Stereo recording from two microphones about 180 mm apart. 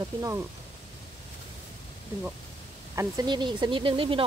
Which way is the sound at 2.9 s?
20° right (ahead or behind).